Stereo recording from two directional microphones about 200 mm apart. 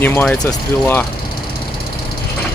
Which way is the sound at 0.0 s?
10° left (ahead or behind).